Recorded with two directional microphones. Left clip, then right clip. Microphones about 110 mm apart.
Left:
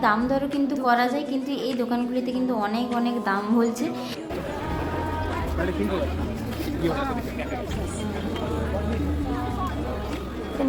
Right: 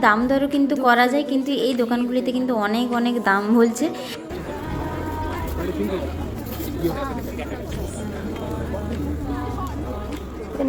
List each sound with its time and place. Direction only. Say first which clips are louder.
0.0 s a woman's voice: right 5 dB; 40° right (ahead or behind)